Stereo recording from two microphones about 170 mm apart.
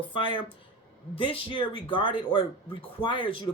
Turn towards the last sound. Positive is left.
turn(degrees=30)  # may be behind; listen again after turning